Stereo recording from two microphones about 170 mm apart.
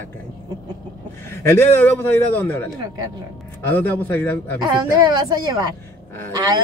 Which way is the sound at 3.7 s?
10° left (ahead or behind).